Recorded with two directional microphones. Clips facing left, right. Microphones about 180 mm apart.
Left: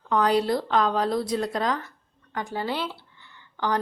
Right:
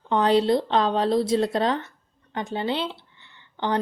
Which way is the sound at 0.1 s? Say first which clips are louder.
Right 3 dB; 25° right (ahead or behind).